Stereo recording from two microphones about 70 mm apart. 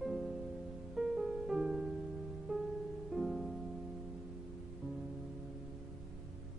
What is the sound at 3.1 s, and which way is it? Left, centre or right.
Music, centre.